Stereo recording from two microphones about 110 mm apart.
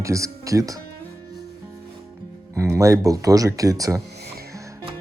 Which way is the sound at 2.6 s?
30° right (ahead or behind).